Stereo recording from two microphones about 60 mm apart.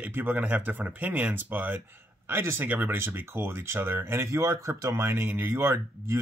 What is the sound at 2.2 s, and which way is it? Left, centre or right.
Speech, right.